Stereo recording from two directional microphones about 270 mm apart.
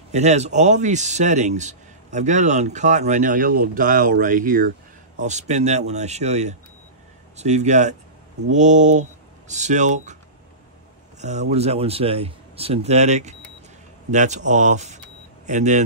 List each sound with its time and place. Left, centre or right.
0.1 s a man's voice: right
11.1 s a man's voice: right